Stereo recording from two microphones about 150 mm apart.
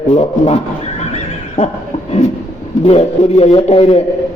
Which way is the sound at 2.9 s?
45° left (ahead or behind).